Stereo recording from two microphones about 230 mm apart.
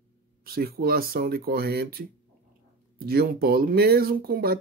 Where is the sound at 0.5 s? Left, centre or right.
Right.